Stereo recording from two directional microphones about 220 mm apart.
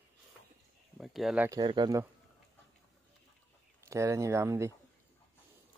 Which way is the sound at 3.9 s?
15° right (ahead or behind).